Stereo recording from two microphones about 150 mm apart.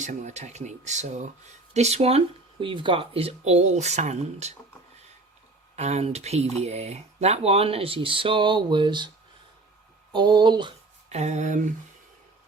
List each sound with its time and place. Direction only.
0.0 s speech: 55° right (ahead or behind)
5.7 s speech: 45° right (ahead or behind); by 9.0 s 30° right (ahead or behind)
10.1 s speech: 30° right (ahead or behind)
11.1 s speech: 50° right (ahead or behind)